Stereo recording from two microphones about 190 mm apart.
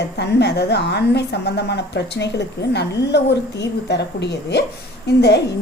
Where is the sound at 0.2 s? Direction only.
60° left (ahead or behind).